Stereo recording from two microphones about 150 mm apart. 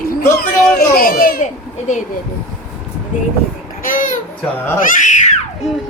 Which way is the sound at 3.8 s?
65° left (ahead or behind).